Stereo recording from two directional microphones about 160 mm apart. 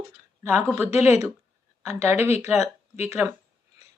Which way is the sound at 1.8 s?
15° right (ahead or behind).